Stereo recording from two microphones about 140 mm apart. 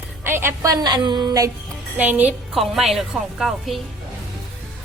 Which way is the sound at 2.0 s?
10° right (ahead or behind).